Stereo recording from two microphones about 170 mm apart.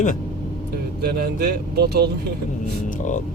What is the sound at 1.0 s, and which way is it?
Speech, 70° right (ahead or behind).